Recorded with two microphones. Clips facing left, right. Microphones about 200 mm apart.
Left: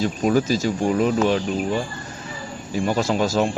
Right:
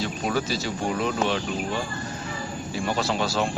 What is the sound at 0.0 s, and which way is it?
Speech, 45° left (ahead or behind).